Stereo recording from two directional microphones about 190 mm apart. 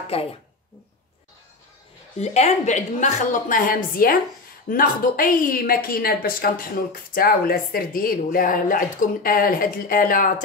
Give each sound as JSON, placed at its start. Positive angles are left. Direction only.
{"t": 0.1, "sound": "a woman's voice", "side_deg": 30}
{"t": 2.1, "sound": "a woman's voice", "side_deg": 35}